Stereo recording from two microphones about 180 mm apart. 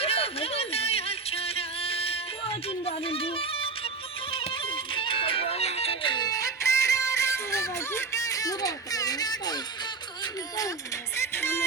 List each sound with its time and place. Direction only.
0.0 s music: 35° left (ahead or behind)
4.9 s music: 30° left (ahead or behind)
11.2 s music: 15° left (ahead or behind)